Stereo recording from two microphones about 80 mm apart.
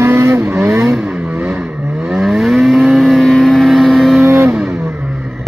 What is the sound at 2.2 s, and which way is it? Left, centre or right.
Vehicle, centre.